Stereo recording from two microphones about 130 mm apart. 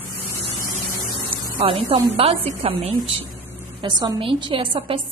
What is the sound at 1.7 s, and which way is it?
A woman's voice, 50° right (ahead or behind).